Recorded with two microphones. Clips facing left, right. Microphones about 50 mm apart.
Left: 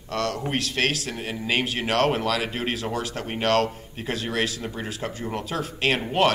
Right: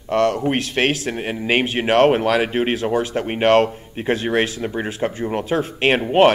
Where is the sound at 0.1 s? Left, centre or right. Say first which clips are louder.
Right 9 dB; right.